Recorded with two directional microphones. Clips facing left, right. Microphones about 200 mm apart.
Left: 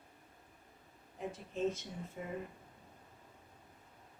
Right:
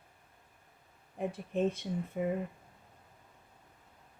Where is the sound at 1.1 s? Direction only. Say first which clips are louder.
Right 7 dB; 60° right (ahead or behind).